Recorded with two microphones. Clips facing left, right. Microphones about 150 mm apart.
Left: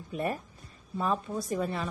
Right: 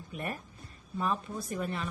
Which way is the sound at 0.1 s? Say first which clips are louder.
Left 6 dB; 30° left (ahead or behind).